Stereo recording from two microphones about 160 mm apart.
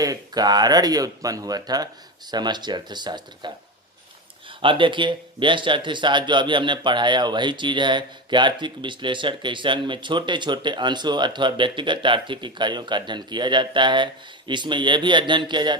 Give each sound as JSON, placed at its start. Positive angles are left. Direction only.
{"t": 0.0, "sound": "speech", "side_deg": -25}